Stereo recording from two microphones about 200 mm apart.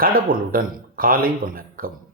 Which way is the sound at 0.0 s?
45° right (ahead or behind).